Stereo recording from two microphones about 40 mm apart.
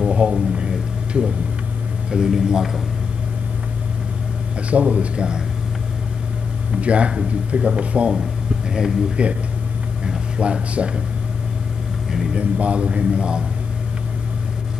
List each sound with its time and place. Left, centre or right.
0.0 s a sound: right
2.0 s a man's voice: centre
4.6 s speech: right
6.8 s speech: right
9.1 s a man's voice: right
12.1 s speech: centre
12.4 s a man's voice: right